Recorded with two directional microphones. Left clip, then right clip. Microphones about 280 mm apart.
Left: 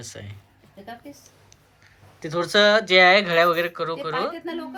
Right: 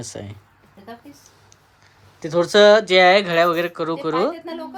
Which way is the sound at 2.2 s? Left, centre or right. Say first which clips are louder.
Right 5 dB; centre.